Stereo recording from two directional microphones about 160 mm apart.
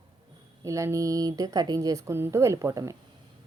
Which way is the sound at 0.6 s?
20° right (ahead or behind).